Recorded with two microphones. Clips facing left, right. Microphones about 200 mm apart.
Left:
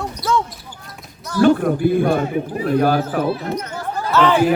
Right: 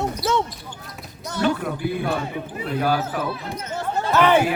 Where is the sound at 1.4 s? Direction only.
45° left (ahead or behind).